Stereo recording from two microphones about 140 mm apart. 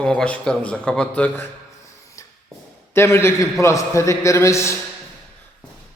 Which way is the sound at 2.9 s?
20° left (ahead or behind).